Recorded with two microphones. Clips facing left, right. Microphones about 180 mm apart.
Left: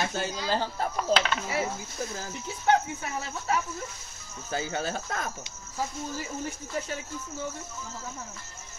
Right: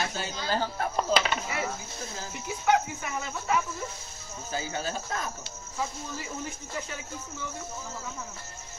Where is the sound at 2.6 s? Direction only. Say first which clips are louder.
Left 1 dB; 35° left (ahead or behind).